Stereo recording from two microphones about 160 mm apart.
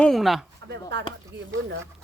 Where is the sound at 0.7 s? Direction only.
90° right.